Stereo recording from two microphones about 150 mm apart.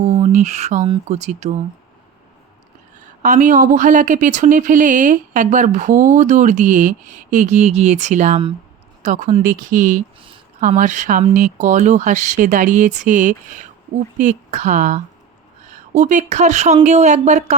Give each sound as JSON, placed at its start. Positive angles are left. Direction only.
{"t": 0.0, "sound": "a sound", "side_deg": -50}
{"t": 1.0, "sound": "speech", "side_deg": -50}
{"t": 3.2, "sound": "speech", "side_deg": -60}